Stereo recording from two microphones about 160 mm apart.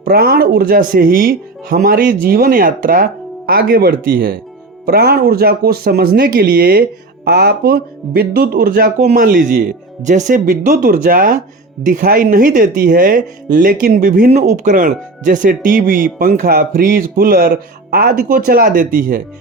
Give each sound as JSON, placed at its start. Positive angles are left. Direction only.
{"t": 0.0, "sound": "speech", "side_deg": -65}
{"t": 4.9, "sound": "speech", "side_deg": -75}
{"t": 14.3, "sound": "speech", "side_deg": -45}